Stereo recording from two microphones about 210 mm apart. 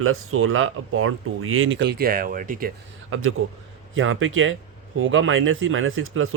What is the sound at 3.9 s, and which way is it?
Speech, 70° right (ahead or behind).